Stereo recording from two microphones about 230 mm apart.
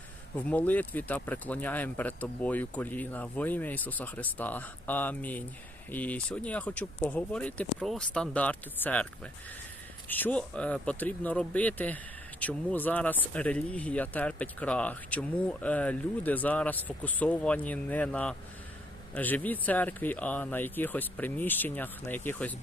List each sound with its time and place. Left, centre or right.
0.3 s speech: centre
10.1 s speech: centre